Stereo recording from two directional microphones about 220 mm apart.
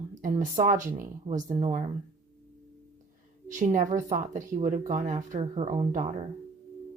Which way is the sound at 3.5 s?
35° right (ahead or behind).